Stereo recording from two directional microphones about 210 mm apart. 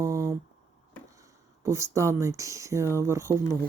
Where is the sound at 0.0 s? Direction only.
15° right (ahead or behind).